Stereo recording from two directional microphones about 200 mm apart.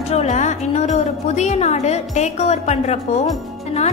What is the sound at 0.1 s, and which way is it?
A woman's voice, 35° left (ahead or behind).